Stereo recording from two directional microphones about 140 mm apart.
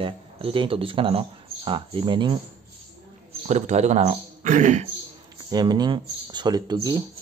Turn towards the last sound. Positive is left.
turn(degrees=-30)  # may be behind; listen again after turning